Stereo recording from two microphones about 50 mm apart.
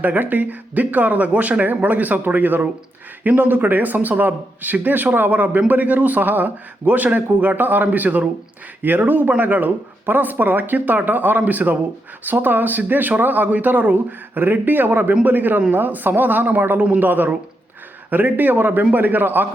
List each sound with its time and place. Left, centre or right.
0.0 s a man's voice: right